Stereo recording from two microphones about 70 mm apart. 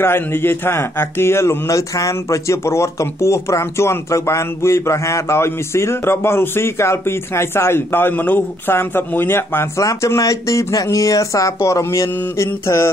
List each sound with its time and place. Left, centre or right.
0.0 s speech: left
9.8 s speech: left